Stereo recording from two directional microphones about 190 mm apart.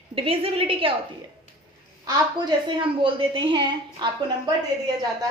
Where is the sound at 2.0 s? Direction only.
20° right (ahead or behind).